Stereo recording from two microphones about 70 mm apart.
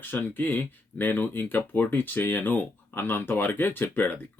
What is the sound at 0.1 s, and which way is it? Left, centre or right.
Speech, left.